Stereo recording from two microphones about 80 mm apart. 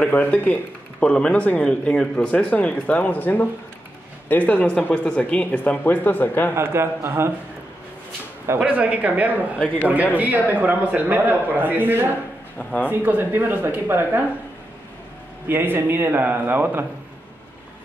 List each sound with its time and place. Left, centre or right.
0.0 s speech: left
6.5 s a man's voice: right
8.5 s a man's voice: centre
12.5 s speech: centre
12.9 s a man's voice: right
15.4 s a man's voice: right